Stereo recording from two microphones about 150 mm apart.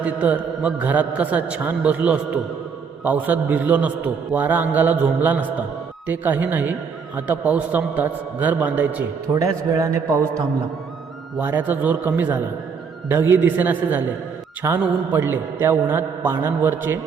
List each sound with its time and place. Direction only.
0.0 s a man's voice: 10° right (ahead or behind)
9.3 s a man's voice: 20° right (ahead or behind)